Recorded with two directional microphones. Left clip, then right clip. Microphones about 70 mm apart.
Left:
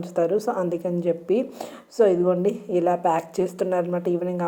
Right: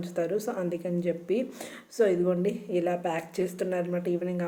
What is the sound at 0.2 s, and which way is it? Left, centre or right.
Speech, left.